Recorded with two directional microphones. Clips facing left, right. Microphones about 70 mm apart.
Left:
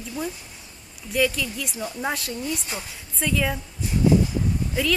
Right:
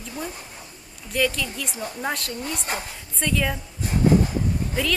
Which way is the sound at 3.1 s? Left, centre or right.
Centre.